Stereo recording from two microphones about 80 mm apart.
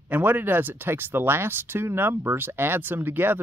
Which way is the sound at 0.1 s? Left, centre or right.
Right.